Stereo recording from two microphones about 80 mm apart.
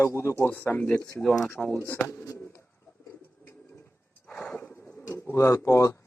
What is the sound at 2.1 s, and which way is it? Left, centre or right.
Speech, left.